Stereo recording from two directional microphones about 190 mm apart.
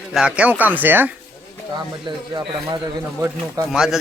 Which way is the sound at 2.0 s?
25° right (ahead or behind).